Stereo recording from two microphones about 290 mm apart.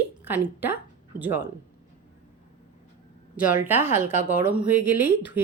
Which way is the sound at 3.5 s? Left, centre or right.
Centre.